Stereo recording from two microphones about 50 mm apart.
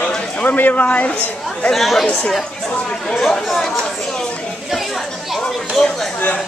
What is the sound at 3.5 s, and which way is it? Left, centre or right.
Speech, centre.